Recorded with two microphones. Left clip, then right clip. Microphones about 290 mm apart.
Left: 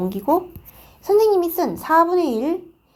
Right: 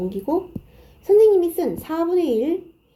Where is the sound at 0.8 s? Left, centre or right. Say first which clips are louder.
Right 2 dB; centre.